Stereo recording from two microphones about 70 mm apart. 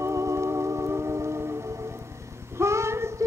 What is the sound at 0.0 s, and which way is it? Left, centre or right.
Music, right.